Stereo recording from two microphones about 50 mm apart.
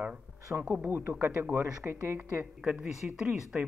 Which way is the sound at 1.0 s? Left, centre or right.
Right.